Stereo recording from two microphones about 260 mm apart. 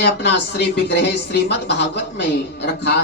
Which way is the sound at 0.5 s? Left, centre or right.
Left.